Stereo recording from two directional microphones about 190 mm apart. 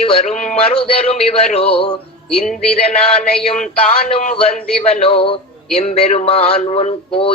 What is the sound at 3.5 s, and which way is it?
Speech, 35° left (ahead or behind).